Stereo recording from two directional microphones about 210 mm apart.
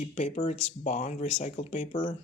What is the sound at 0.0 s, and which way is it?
Speech, 35° left (ahead or behind).